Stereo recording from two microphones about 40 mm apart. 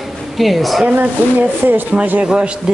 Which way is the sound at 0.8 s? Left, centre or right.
Right.